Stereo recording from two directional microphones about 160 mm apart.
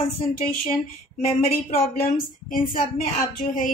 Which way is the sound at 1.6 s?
60° left (ahead or behind).